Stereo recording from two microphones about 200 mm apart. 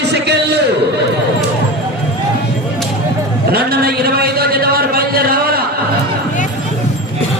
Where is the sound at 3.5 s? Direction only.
50° right (ahead or behind).